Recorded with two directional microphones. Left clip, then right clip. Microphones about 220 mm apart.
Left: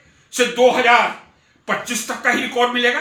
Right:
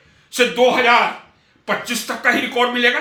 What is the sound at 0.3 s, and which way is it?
Speech, 20° right (ahead or behind).